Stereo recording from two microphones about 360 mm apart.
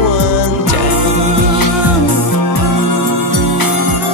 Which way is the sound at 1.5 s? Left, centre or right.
Left.